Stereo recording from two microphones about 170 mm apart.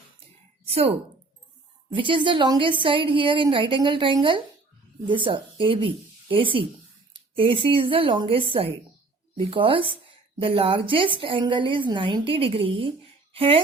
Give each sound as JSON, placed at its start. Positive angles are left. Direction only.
{"t": 0.6, "sound": "a woman's voice", "side_deg": -35}